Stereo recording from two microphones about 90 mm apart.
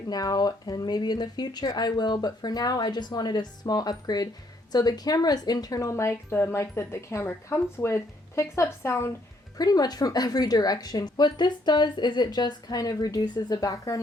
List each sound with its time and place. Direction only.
0.1 s a woman's voice: 45° left (ahead or behind); by 9.1 s 30° left (ahead or behind)
9.6 s a woman's voice: 45° left (ahead or behind)